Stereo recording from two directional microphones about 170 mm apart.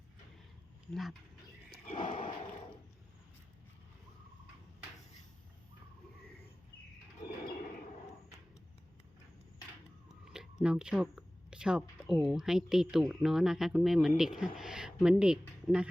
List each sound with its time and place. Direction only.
1.9 s a sound: 50° left (ahead or behind)
2.1 s gasp: 30° left (ahead or behind)
10.2 s speech: 5° right (ahead or behind)